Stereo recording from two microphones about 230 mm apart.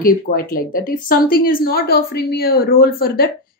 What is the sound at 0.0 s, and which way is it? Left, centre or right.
A woman's voice, left.